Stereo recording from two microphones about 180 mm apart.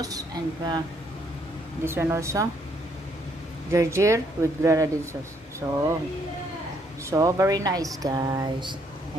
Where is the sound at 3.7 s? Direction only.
15° right (ahead or behind).